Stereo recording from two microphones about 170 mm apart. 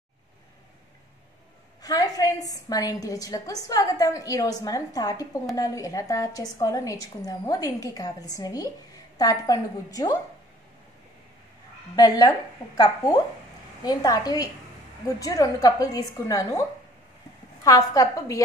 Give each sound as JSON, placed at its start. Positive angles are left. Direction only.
{"t": 1.8, "sound": "a woman's voice", "side_deg": 20}
{"t": 11.9, "sound": "a woman's voice", "side_deg": 20}
{"t": 17.6, "sound": "a woman's voice", "side_deg": 20}